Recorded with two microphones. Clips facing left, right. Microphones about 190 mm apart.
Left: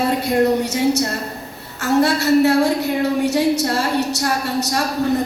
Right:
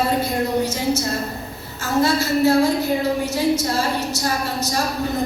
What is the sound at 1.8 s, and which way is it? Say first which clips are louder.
A woman's voice: left 3 dB; 70° left (ahead or behind).